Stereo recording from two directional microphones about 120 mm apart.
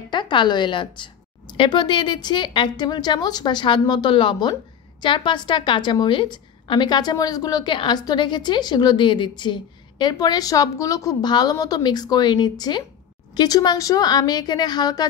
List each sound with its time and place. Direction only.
0.1 s a woman's voice: 40° left (ahead or behind)